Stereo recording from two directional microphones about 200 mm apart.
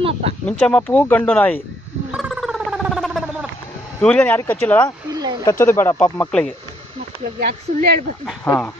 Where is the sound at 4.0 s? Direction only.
5° left (ahead or behind).